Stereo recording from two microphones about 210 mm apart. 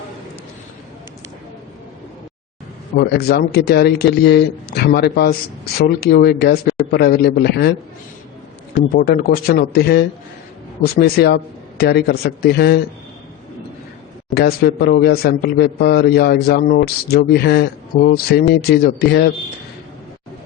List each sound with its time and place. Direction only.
2.9 s a man's voice: 50° left (ahead or behind)
8.9 s a man's voice: 45° left (ahead or behind)
14.3 s a man's voice: 45° left (ahead or behind)